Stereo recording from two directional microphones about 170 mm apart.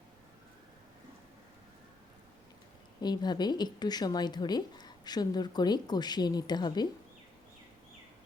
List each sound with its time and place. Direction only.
3.0 s a woman's voice: 25° left (ahead or behind)